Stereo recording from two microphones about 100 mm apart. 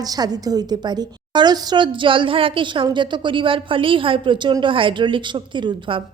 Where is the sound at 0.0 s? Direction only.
40° right (ahead or behind).